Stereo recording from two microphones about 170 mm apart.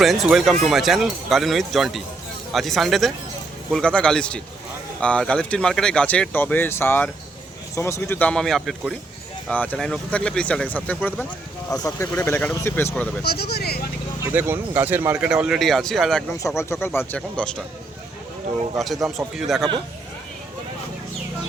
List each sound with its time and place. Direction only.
0.0 s speech: centre (ahead or behind)
13.2 s speech: 70° left (ahead or behind)
14.3 s speech: 10° right (ahead or behind)
16.6 s speech: 15° left (ahead or behind)
19.0 s speech: centre (ahead or behind)